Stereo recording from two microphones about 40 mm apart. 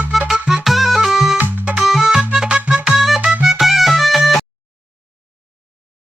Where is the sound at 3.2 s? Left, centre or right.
Right.